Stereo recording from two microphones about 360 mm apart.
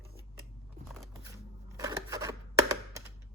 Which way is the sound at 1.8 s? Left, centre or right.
Centre.